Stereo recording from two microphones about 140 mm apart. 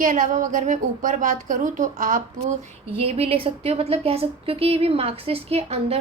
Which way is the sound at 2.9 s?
45° right (ahead or behind).